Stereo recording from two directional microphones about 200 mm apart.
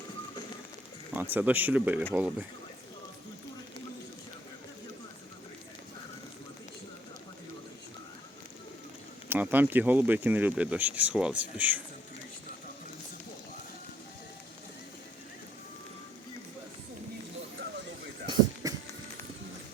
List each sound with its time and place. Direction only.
1.1 s speech: 10° right (ahead or behind)
9.3 s speech: 10° right (ahead or behind)
18.6 s a sound: 15° right (ahead or behind)